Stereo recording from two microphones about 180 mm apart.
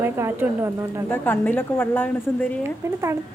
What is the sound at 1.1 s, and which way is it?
Speech, 10° left (ahead or behind).